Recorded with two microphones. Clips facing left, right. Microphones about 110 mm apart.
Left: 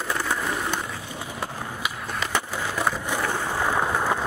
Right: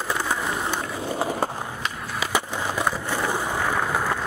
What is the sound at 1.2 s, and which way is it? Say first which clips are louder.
Skateboard: right 9 dB; 40° right (ahead or behind).